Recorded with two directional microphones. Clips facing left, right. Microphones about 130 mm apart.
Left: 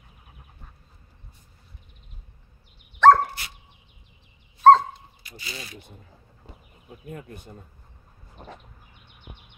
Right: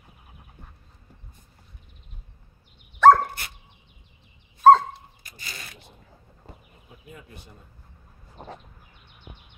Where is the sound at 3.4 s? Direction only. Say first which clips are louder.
Right 1 dB; 50° right (ahead or behind).